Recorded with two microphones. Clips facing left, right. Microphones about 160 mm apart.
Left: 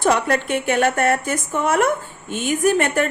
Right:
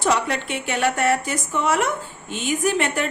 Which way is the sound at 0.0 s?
55° left (ahead or behind).